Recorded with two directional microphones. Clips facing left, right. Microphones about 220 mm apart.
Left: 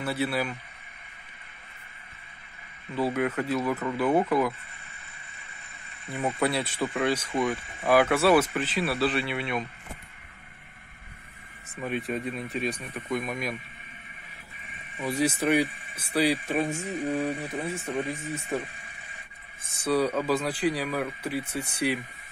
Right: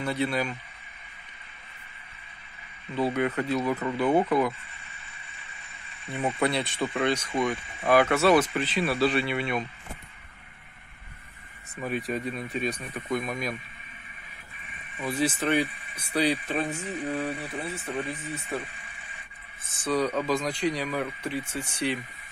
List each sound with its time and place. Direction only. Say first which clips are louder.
0.0 s speech: right 1 dB; 5° left (ahead or behind)
2.9 s speech: right 1 dB; 5° left (ahead or behind)
6.1 s speech: even; 5° left (ahead or behind)
11.7 s speech: even; centre (ahead or behind)
15.0 s speech: left 1 dB; 10° left (ahead or behind)
19.7 s speech: left 1 dB; 10° left (ahead or behind)